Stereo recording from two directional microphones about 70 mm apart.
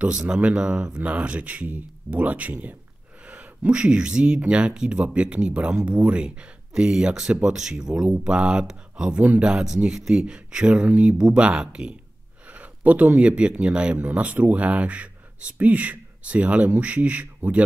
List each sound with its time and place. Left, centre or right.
0.0 s speech: centre
9.2 s speech: right
9.5 s speech: centre